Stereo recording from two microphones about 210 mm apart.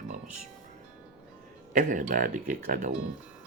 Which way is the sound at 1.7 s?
40° right (ahead or behind).